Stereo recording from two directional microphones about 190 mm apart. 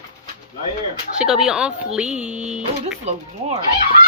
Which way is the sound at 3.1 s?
35° right (ahead or behind).